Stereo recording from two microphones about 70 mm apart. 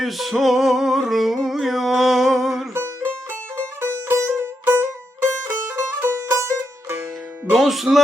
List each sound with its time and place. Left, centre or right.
0.0 s music: centre
2.7 s music: right
7.5 s music: centre